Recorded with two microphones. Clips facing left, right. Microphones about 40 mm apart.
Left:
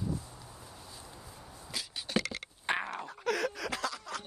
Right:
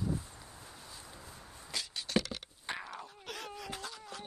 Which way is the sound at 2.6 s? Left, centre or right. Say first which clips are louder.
Left 8 dB; left.